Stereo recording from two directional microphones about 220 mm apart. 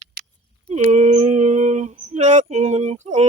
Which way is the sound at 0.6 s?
30° right (ahead or behind).